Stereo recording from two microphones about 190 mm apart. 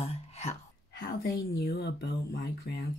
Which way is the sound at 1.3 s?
20° left (ahead or behind).